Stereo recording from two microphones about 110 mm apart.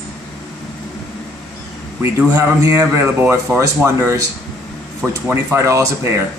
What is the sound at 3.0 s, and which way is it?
Speech, 10° right (ahead or behind).